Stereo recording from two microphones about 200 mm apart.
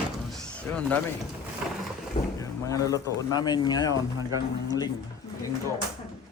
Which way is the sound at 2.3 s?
15° left (ahead or behind).